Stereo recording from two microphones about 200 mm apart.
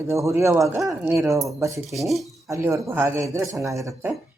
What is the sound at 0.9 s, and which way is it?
Speech, 15° right (ahead or behind).